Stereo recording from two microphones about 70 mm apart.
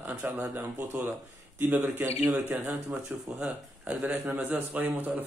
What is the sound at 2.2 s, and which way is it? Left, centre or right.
Speech, right.